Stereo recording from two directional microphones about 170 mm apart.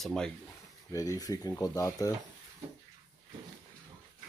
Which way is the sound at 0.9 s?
20° left (ahead or behind).